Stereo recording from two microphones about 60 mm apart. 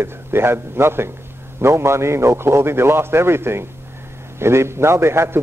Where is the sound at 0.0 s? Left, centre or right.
Right.